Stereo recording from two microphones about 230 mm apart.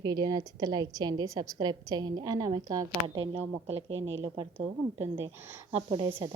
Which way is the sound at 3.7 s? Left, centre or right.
Right.